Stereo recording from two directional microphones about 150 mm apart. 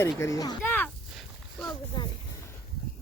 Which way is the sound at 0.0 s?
20° left (ahead or behind).